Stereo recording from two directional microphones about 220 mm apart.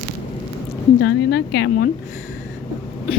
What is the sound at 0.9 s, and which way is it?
Speech, 45° left (ahead or behind).